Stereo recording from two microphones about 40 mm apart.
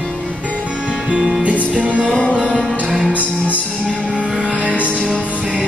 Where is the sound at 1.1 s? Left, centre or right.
Right.